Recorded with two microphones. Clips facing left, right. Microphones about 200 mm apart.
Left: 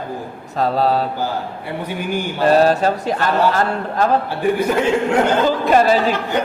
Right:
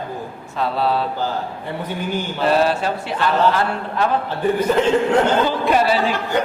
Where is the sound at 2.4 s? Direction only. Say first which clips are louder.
Left 4 dB; 40° left (ahead or behind).